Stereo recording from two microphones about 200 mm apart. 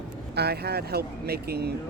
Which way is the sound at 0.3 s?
55° right (ahead or behind).